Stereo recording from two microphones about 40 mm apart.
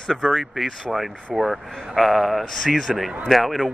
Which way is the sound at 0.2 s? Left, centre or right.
Centre.